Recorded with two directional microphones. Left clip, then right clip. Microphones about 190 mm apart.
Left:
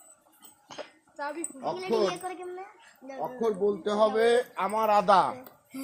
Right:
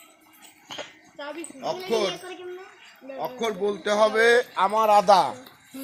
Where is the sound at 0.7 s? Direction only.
Centre (ahead or behind).